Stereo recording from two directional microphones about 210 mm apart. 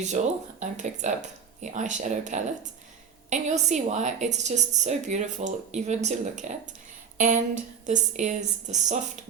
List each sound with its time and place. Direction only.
0.2 s a woman's voice: 40° right (ahead or behind)